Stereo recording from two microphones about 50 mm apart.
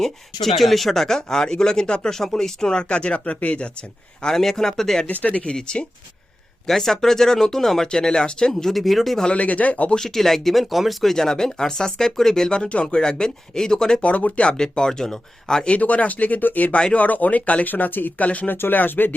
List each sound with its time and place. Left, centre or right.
0.0 s speech: centre
4.4 s speech: centre
5.0 s speech: left
6.7 s speech: centre
9.2 s speech: left
9.9 s speech: centre
14.0 s speech: left
14.5 s speech: centre
15.7 s speech: left
18.5 s speech: left